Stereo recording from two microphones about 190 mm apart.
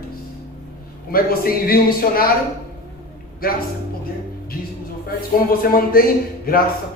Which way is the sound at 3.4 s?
50° left (ahead or behind).